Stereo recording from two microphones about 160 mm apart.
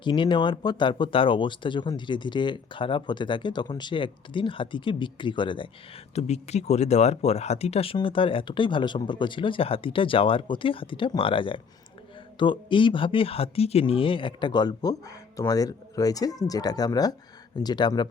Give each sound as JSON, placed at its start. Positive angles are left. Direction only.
{"t": 0.0, "sound": "speech", "side_deg": 30}
{"t": 6.1, "sound": "speech", "side_deg": 40}